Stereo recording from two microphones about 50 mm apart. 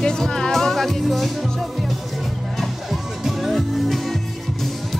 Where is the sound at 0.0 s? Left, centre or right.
Centre.